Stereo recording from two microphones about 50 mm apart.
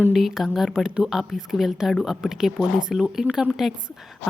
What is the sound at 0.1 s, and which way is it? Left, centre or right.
A woman's voice, centre.